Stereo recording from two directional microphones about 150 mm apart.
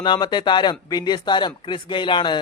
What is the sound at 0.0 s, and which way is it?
Speech, 30° left (ahead or behind).